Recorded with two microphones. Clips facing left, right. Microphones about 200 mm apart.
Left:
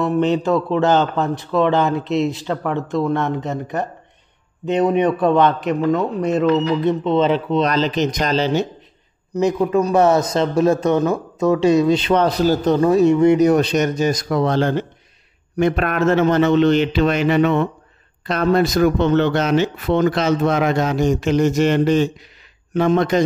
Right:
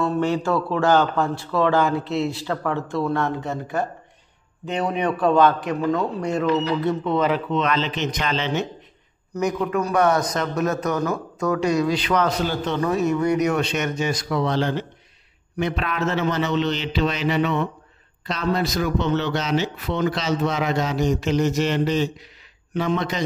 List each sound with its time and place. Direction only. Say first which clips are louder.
0.0 s a man's voice: left 4 dB; 20° left (ahead or behind); by 8.6 s 40° left (ahead or behind)
9.3 s a man's voice: left 6 dB; 25° left (ahead or behind); by 23.2 s 50° left (ahead or behind)